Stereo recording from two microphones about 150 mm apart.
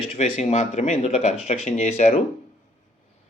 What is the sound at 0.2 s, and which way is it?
Speech, 50° left (ahead or behind).